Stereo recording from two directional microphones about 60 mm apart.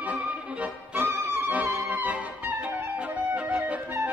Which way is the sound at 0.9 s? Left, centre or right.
Right.